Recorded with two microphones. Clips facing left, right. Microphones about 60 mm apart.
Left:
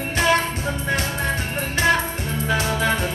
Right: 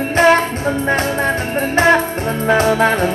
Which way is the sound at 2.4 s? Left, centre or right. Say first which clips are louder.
Right 9 dB; right.